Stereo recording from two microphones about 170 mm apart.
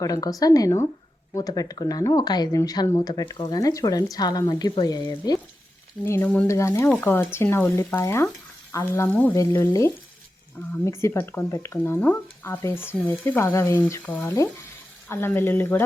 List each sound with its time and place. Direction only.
0.0 s speech: 20° left (ahead or behind)
6.1 s speech: 10° left (ahead or behind)